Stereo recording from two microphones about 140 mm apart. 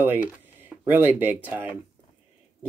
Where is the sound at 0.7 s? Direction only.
15° right (ahead or behind).